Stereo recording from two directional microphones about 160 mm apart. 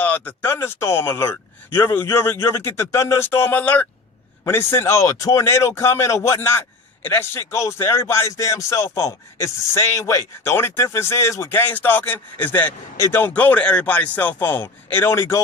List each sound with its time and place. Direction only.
0.0 s speech: 10° left (ahead or behind)